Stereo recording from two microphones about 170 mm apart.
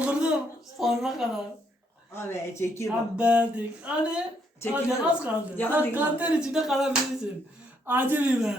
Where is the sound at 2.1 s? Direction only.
15° left (ahead or behind).